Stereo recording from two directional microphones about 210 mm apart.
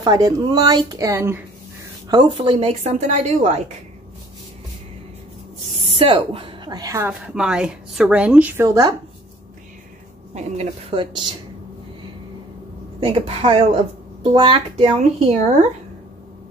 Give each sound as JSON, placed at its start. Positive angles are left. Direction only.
{"t": 0.0, "sound": "a woman's voice", "side_deg": -20}
{"t": 5.9, "sound": "a woman's voice", "side_deg": -25}
{"t": 10.3, "sound": "speech", "side_deg": -30}
{"t": 13.0, "sound": "speech", "side_deg": -25}